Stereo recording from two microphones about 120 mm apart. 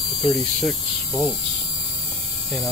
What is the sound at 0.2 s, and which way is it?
Speech, 5° left (ahead or behind).